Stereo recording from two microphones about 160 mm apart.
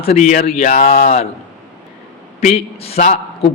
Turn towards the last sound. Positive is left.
turn(degrees=40)  # may be behind; listen again after turning